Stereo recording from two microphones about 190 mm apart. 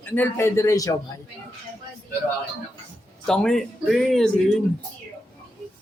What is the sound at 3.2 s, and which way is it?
Speech, 5° left (ahead or behind).